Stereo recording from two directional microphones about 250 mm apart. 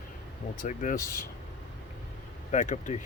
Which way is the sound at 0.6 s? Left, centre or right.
Left.